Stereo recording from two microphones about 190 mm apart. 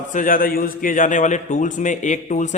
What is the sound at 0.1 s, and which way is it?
A man's voice, 45° left (ahead or behind).